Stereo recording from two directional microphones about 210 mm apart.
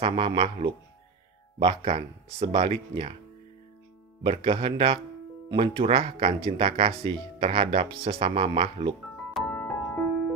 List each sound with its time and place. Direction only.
0.0 s speech: 25° right (ahead or behind)
4.2 s speech: 25° right (ahead or behind)
9.3 s music: 5° left (ahead or behind)